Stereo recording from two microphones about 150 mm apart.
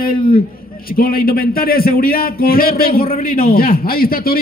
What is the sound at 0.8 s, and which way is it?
A man's voice, 75° left (ahead or behind).